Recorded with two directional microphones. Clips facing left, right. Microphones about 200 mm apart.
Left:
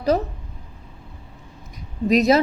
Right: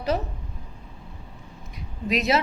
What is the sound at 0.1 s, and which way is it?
Speech, 40° left (ahead or behind).